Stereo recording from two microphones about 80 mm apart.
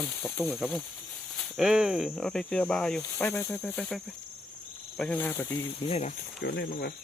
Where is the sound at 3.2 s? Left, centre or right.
Left.